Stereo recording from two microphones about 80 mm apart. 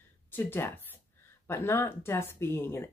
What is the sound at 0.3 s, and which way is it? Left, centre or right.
Speech, left.